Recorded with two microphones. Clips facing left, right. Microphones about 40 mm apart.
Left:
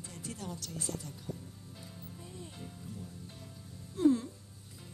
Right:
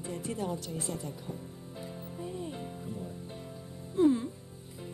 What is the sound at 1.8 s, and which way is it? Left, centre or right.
Music, right.